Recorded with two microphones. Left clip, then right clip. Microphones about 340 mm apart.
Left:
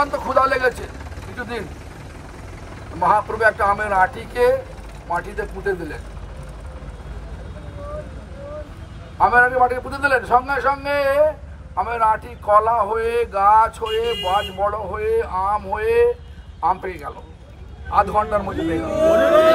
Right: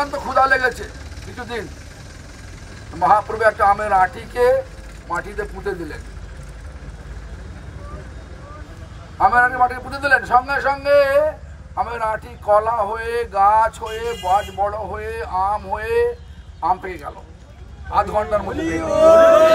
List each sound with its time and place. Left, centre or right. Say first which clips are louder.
0.0 s a man's voice: even; centre
3.0 s speech: right 1 dB; centre
9.2 s speech: even; centre
18.7 s speech: right 5 dB; centre